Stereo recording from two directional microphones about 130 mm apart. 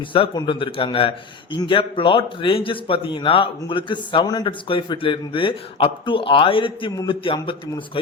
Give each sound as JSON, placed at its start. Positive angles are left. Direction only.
{"t": 0.1, "sound": "a man's voice", "side_deg": 40}